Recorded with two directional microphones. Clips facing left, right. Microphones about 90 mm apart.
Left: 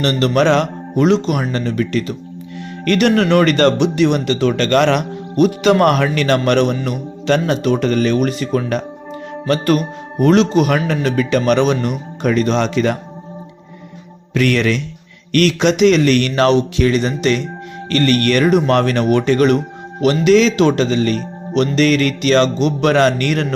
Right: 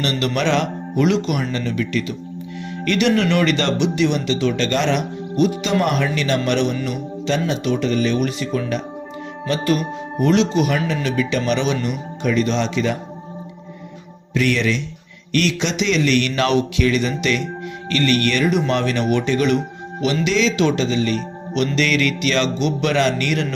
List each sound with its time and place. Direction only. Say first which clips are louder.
0.0 s speech: left 6 dB; 40° left (ahead or behind)
14.3 s speech: left 4 dB; 55° left (ahead or behind)